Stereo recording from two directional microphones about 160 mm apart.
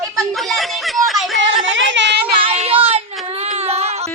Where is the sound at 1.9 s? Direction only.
90° right.